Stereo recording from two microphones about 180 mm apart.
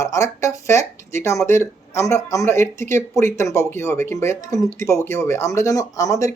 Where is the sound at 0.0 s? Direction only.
15° left (ahead or behind).